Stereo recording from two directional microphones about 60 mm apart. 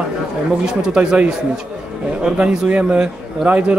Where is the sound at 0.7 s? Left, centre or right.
Centre.